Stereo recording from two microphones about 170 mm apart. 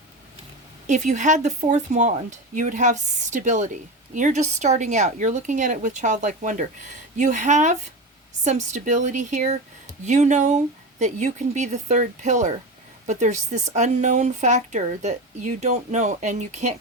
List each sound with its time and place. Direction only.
0.9 s speech: 45° right (ahead or behind)